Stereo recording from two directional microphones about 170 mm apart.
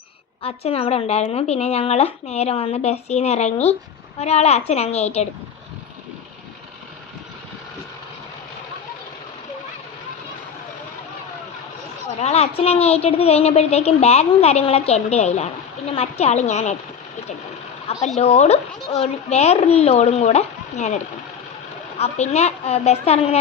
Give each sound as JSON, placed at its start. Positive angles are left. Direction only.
{"t": 0.4, "sound": "a woman's voice", "side_deg": 35}
{"t": 12.2, "sound": "a woman's voice", "side_deg": 40}
{"t": 18.2, "sound": "a woman's voice", "side_deg": 40}